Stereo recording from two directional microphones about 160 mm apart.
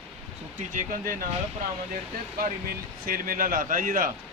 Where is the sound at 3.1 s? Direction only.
60° right (ahead or behind).